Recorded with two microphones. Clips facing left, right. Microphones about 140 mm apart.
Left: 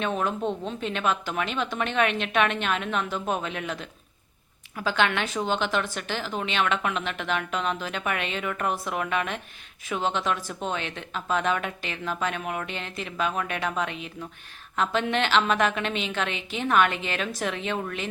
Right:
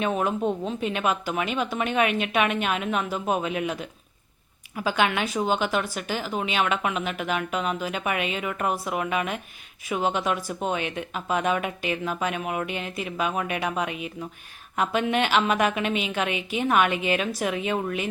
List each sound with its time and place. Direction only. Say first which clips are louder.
0.0 s a woman's voice: right 2 dB; 10° right (ahead or behind)